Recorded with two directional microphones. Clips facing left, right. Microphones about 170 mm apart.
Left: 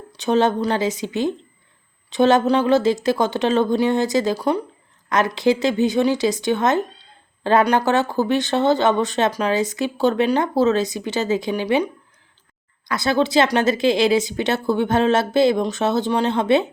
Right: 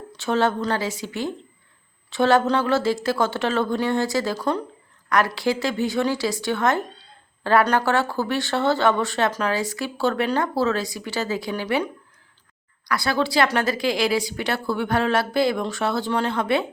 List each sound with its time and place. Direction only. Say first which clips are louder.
0.1 s speech: left 4 dB; 20° left (ahead or behind)
12.9 s speech: left 4 dB; 20° left (ahead or behind)